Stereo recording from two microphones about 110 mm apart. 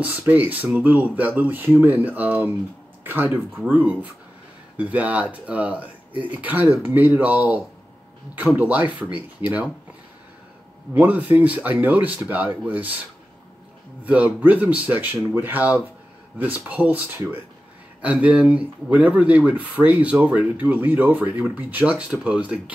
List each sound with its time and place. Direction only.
0.2 s speech: 15° right (ahead or behind)
11.0 s speech: 15° right (ahead or behind)
14.0 s speech: 15° right (ahead or behind)